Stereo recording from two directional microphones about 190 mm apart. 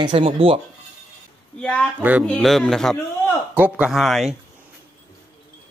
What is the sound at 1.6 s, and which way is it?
Speech, 5° left (ahead or behind).